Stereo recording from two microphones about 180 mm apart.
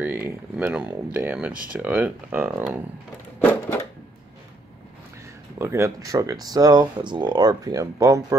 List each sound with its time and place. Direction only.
0.0 s speech: 10° right (ahead or behind)
3.3 s a sound: 10° left (ahead or behind)
5.6 s speech: 15° right (ahead or behind)